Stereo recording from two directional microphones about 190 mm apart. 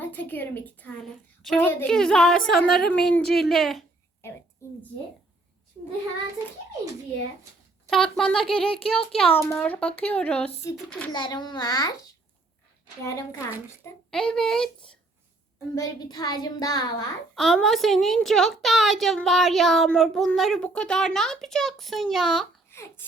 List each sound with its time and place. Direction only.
0.0 s a woman's voice: 10° left (ahead or behind)
7.9 s a woman's voice: centre (ahead or behind)
11.1 s a child's voice: 25° left (ahead or behind)
14.1 s a woman's voice: 5° left (ahead or behind)
15.7 s a child's voice: 20° left (ahead or behind)
17.3 s a woman's voice: centre (ahead or behind)
22.7 s a sound: 15° left (ahead or behind)